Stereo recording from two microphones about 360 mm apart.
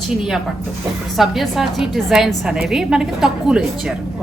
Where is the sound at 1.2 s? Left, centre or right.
Centre.